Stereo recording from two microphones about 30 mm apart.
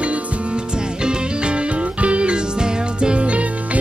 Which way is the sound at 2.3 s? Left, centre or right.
Right.